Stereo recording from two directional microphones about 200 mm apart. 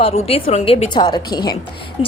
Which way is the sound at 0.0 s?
30° left (ahead or behind).